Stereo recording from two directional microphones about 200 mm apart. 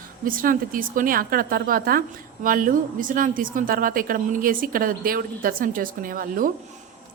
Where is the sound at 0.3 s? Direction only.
45° right (ahead or behind).